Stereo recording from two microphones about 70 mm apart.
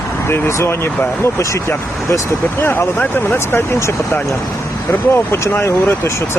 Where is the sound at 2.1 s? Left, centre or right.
Left.